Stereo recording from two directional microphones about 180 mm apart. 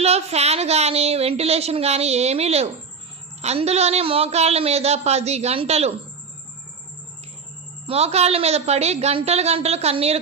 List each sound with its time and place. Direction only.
0.0 s a woman's voice: 35° right (ahead or behind)
7.9 s a woman's voice: 35° right (ahead or behind)